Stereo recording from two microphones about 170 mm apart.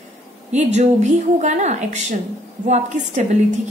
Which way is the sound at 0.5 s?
45° right (ahead or behind).